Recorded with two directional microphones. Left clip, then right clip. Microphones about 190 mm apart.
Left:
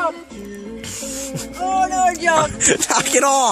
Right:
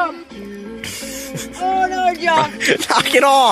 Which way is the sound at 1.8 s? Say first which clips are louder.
Left 2 dB; 30° left (ahead or behind).